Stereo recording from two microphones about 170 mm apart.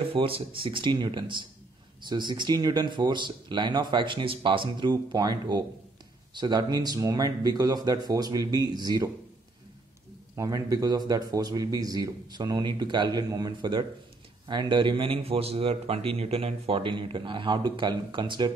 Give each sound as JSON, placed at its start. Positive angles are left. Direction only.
{"t": 0.1, "sound": "a man's voice", "side_deg": -30}
{"t": 10.3, "sound": "a man's voice", "side_deg": -20}